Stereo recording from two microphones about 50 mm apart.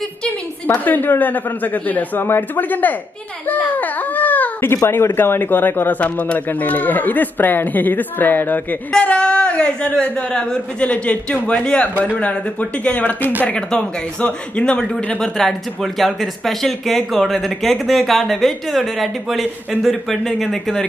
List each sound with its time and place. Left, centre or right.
0.7 s speech: left
4.9 s speech: left
5.9 s speech: left
9.0 s a man's voice: left
12.0 s speech: left
13.6 s a man's voice: centre
15.1 s speech: centre